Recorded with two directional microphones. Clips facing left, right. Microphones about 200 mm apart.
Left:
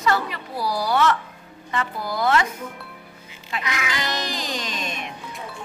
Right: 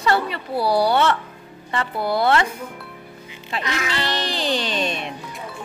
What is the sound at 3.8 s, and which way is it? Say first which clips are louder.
Speech: right 3 dB; 30° right (ahead or behind).